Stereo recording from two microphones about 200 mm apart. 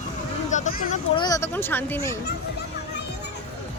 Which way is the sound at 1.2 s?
15° left (ahead or behind).